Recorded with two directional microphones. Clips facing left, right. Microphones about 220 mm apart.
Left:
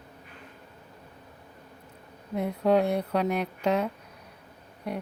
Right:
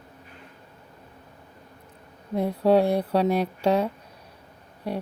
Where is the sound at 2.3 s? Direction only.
35° right (ahead or behind).